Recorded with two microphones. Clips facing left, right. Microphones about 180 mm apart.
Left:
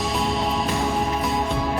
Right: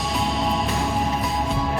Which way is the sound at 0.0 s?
Centre (ahead or behind).